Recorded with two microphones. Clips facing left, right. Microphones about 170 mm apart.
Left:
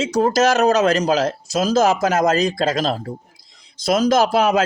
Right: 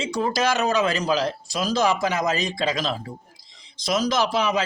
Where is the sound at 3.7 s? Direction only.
50° left (ahead or behind).